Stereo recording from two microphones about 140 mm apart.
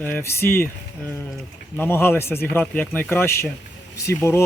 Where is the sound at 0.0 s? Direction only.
15° left (ahead or behind).